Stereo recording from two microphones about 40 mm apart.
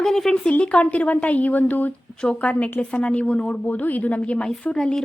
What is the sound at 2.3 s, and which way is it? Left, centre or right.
A woman's voice, left.